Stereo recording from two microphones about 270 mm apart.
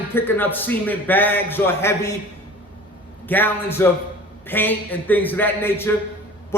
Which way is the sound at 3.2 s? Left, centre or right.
Centre.